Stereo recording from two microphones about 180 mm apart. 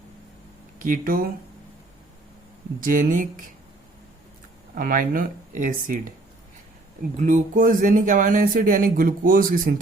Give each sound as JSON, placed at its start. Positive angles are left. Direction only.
{"t": 0.8, "sound": "speech", "side_deg": -50}
{"t": 2.8, "sound": "speech", "side_deg": -50}
{"t": 4.7, "sound": "speech", "side_deg": -50}
{"t": 7.2, "sound": "speech", "side_deg": -45}